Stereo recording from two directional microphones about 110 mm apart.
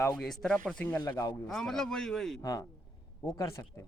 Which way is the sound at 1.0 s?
35° left (ahead or behind).